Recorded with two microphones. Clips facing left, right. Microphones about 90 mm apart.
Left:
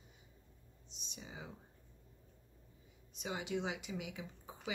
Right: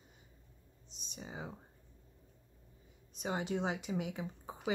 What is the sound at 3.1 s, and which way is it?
Speech, 40° right (ahead or behind).